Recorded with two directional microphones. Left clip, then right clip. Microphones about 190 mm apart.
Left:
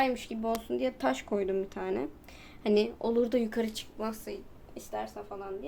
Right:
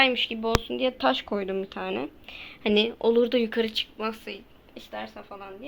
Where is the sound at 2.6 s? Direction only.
20° right (ahead or behind).